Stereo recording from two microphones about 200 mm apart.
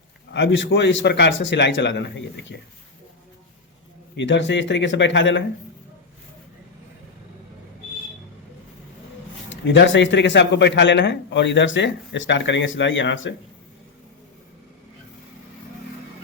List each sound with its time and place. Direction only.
0.3 s speech: 65° left (ahead or behind)
4.2 s speech: 65° left (ahead or behind)
9.5 s speech: 65° left (ahead or behind)